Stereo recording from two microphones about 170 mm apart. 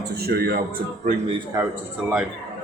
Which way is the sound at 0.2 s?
65° right (ahead or behind).